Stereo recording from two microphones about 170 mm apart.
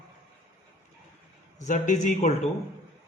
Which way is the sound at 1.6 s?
45° left (ahead or behind).